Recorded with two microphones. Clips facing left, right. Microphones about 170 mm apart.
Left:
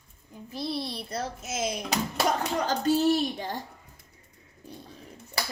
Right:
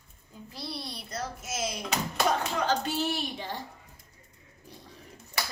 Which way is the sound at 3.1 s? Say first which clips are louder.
Left 6 dB; 45° left (ahead or behind).